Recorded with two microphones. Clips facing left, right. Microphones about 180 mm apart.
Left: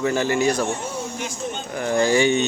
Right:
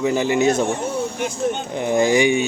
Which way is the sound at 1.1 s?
55° right (ahead or behind).